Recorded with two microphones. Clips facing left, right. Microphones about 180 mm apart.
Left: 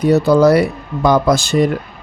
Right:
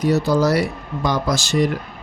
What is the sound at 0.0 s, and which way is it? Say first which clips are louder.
Speech: left 6 dB; 60° left (ahead or behind).